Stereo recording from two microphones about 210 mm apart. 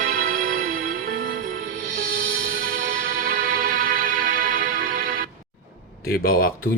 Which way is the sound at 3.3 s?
45° right (ahead or behind).